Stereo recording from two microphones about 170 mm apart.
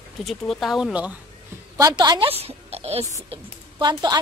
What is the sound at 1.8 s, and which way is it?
A woman's voice, 25° right (ahead or behind).